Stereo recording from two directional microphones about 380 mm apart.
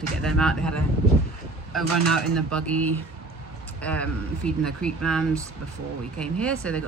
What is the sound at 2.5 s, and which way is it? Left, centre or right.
Speech, centre.